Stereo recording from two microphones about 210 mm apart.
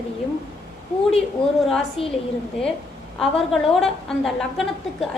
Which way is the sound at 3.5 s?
Centre (ahead or behind).